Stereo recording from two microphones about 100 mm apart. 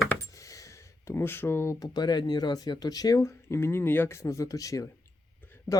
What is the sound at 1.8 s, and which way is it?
Speech, 45° left (ahead or behind).